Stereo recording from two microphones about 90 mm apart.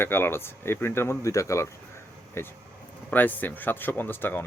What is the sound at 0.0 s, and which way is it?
Speech, 25° left (ahead or behind).